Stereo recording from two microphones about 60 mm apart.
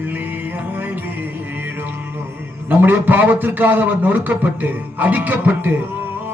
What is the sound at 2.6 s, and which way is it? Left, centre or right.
A man's voice, right.